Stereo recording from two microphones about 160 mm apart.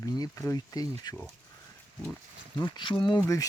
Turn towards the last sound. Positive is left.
turn(degrees=25)  # may be behind; listen again after turning